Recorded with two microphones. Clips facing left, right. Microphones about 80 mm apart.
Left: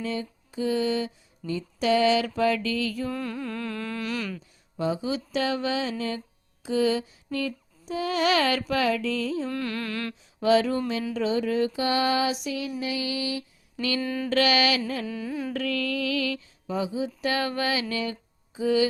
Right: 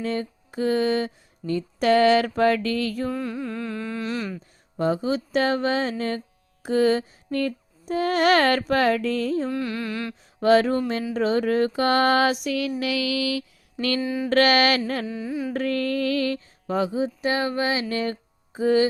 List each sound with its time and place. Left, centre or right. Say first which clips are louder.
0.0 s a sound: right 4 dB; right
3.1 s music: right 3 dB; centre
4.4 s a sound: right 4 dB; right
9.5 s music: right 3 dB; centre
10.4 s a sound: right 3 dB; right
12.8 s mantra: right 5 dB; right
14.0 s music: right 3 dB; centre
14.3 s a sound: right 4 dB; right
15.0 s music: right 2 dB; right
15.5 s music: right 5 dB; right
16.6 s speech: right 5 dB; right
17.0 s music: right 3 dB; right